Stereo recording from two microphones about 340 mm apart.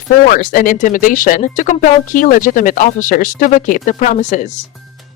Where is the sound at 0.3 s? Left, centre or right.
Left.